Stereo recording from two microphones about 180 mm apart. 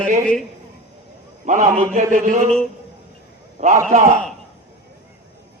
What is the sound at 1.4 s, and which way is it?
A man's voice, 45° right (ahead or behind).